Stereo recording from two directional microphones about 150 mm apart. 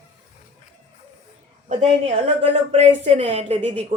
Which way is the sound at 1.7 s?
45° right (ahead or behind).